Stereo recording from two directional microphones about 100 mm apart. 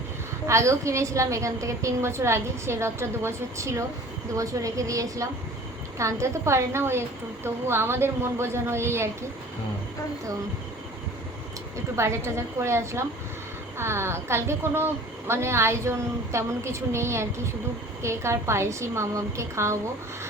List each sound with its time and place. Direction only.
0.4 s a woman's voice: 30° right (ahead or behind)
11.9 s a woman's voice: 25° right (ahead or behind)